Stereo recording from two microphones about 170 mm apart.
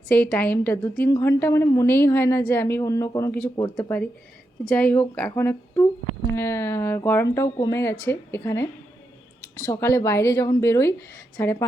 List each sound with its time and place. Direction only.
0.1 s a woman's voice: 10° left (ahead or behind)
9.6 s a woman's voice: 15° left (ahead or behind)